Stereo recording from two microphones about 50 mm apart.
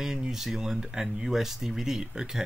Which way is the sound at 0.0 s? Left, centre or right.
Centre.